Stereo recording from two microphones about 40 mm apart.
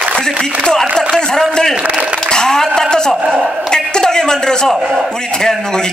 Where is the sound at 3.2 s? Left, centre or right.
Right.